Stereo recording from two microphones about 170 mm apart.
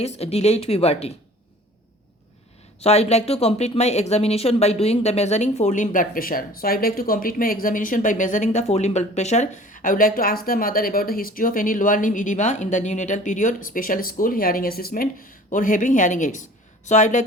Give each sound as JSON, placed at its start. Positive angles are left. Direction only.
{"t": 0.0, "sound": "speech", "side_deg": 35}
{"t": 2.8, "sound": "speech", "side_deg": 40}